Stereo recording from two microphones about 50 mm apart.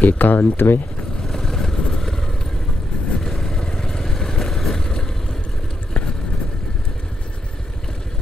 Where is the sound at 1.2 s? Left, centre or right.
Centre.